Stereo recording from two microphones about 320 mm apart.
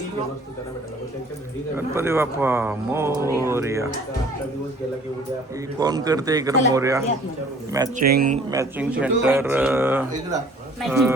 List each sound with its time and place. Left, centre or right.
1.7 s speech: centre
5.8 s speech: centre
8.1 s speech: right
8.4 s speech: centre